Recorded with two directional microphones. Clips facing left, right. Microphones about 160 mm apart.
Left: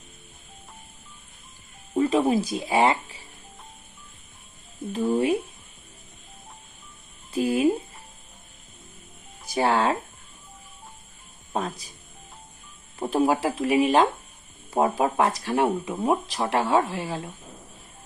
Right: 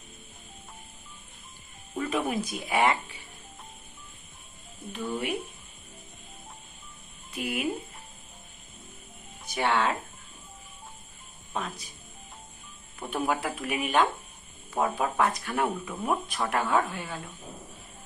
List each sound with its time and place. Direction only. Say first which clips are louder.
2.0 s speech: left 8 dB; 30° left (ahead or behind)
4.9 s speech: left 9 dB; 35° left (ahead or behind)
7.3 s speech: left 10 dB; 35° left (ahead or behind)
9.5 s speech: left 4 dB; 35° left (ahead or behind)
11.5 s speech: left 5 dB; 35° left (ahead or behind)
13.0 s speech: left 7 dB; 35° left (ahead or behind)